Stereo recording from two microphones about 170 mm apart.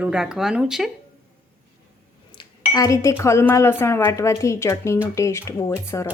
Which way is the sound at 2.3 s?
30° left (ahead or behind).